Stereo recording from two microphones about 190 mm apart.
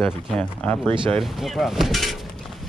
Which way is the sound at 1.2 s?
Centre (ahead or behind).